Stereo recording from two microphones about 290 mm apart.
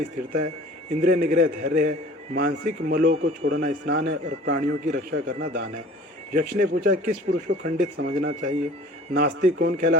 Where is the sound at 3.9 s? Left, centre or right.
Right.